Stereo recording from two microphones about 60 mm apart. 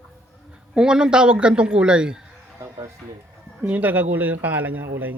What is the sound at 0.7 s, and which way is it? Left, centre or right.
A man's voice, centre.